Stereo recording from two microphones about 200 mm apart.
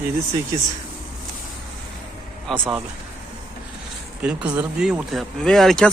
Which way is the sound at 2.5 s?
Centre (ahead or behind).